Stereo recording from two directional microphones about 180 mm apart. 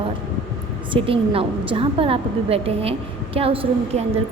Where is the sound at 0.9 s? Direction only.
30° right (ahead or behind).